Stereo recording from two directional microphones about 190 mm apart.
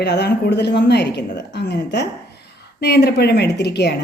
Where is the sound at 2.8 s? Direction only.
60° left (ahead or behind).